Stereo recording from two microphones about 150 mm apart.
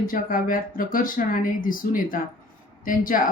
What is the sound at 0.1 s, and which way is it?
Speech, 65° left (ahead or behind).